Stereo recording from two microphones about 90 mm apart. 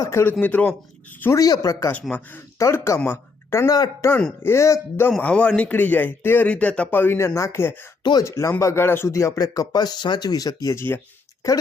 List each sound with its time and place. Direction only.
0.0 s a man's voice: 30° left (ahead or behind)
0.3 s a man's voice: 20° left (ahead or behind)
1.4 s speech: 40° left (ahead or behind)
1.9 s speech: 15° left (ahead or behind)
2.6 s speech: 30° left (ahead or behind)
5.2 s a man's voice: 15° left (ahead or behind); by 10.8 s 40° left (ahead or behind)